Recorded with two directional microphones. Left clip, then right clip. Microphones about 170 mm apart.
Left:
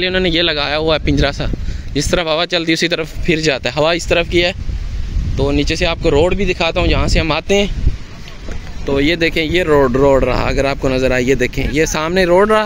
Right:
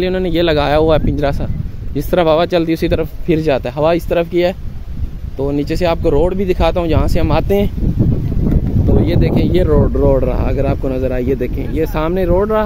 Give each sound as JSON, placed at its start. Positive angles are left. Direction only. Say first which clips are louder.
{"t": 0.0, "sound": "speech", "louder": "left 1 dB", "side_deg": -10}
{"t": 8.9, "sound": "speech", "louder": "left 3 dB", "side_deg": -10}
{"t": 9.7, "sound": "speech", "louder": "left 6 dB", "side_deg": 5}